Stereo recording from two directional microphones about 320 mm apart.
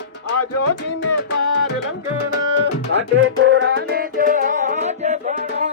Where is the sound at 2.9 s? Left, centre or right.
Right.